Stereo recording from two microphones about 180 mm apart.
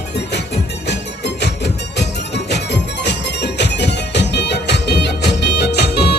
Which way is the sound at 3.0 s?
70° left (ahead or behind).